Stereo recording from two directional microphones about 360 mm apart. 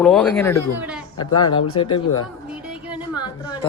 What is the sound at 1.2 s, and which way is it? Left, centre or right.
A woman's voice, centre.